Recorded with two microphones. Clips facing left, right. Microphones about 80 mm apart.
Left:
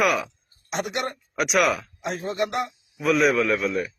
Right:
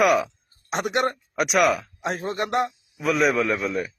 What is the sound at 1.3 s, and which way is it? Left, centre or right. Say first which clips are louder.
Speech: right 1 dB; centre.